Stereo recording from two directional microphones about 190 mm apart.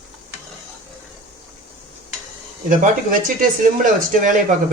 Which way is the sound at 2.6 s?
45° right (ahead or behind).